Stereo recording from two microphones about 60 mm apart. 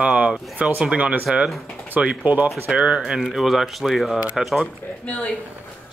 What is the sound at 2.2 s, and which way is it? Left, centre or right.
Speech, right.